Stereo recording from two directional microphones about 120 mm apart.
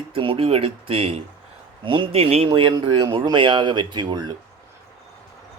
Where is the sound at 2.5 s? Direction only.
45° right (ahead or behind).